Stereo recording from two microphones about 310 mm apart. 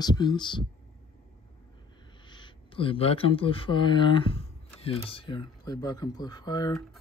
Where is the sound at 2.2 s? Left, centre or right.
Centre.